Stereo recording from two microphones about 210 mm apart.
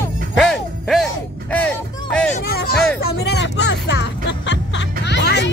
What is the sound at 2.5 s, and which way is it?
Speech, 45° left (ahead or behind).